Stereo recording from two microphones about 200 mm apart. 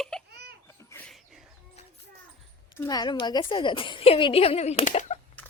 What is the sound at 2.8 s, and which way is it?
A woman's voice, 20° left (ahead or behind).